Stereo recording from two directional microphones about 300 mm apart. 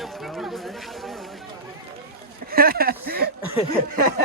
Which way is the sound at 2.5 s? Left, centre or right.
Right.